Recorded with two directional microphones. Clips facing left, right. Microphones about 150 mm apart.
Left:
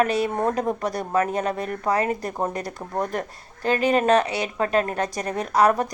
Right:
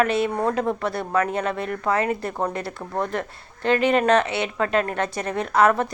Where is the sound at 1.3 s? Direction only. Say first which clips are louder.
Even; 40° left (ahead or behind).